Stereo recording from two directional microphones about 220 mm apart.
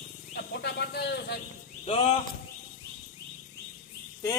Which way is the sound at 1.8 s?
25° left (ahead or behind).